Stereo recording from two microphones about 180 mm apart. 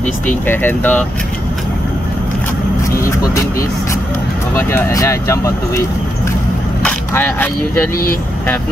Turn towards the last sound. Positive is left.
turn(degrees=15)  # may be behind; listen again after turning